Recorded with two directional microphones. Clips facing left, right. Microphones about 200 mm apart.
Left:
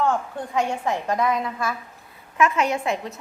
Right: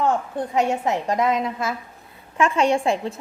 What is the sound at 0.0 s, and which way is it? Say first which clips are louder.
A woman's voice: right 2 dB; 20° right (ahead or behind).